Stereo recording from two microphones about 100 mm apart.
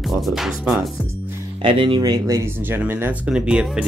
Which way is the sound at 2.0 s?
40° right (ahead or behind).